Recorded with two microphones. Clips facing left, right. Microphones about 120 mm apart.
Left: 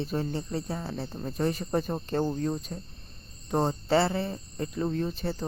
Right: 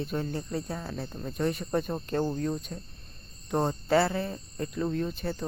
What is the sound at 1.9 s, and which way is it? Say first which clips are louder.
Speech: left 1 dB; 5° left (ahead or behind).